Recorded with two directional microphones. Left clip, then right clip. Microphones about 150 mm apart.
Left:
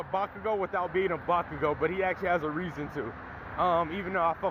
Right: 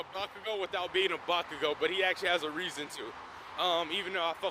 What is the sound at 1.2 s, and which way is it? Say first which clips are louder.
Speech: left 4 dB; 50° right (ahead or behind).